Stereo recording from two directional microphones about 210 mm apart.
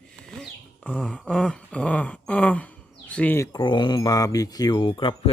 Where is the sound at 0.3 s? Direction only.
5° left (ahead or behind).